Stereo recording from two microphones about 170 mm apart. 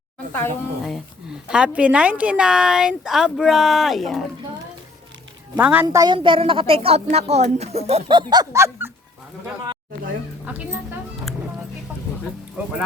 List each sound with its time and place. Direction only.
0.3 s speech: 15° left (ahead or behind)
0.9 s a woman's voice: centre (ahead or behind)
5.5 s a woman's voice: 10° right (ahead or behind)
6.1 s speech: 30° right (ahead or behind); by 8.9 s 15° right (ahead or behind)
10.4 s a woman's voice: 10° right (ahead or behind)
12.6 s a woman's voice: 10° right (ahead or behind)